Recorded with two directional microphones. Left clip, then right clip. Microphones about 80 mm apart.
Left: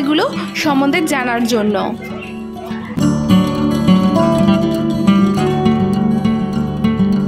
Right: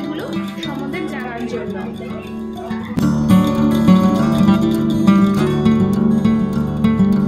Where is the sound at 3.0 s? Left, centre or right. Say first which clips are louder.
Left 1 dB; left.